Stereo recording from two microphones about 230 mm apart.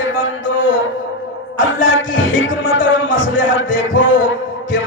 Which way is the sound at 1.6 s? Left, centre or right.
Left.